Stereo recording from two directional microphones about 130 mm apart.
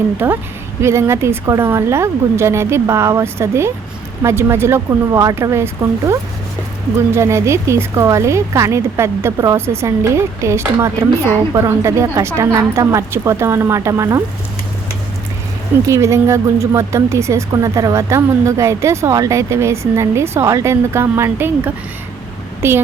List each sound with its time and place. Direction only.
0.2 s a woman's voice: 15° right (ahead or behind)
15.9 s a woman's voice: 25° right (ahead or behind)